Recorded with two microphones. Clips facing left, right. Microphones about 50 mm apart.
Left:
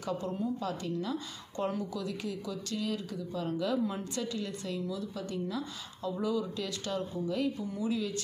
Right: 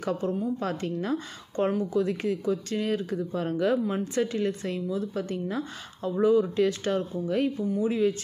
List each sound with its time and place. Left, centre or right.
0.0 s speech: right